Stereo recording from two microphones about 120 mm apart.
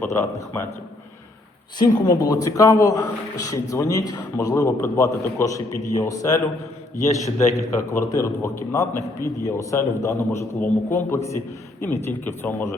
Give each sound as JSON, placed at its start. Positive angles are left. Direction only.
{"t": 0.0, "sound": "a man's voice", "side_deg": 20}
{"t": 1.8, "sound": "a man's voice", "side_deg": 35}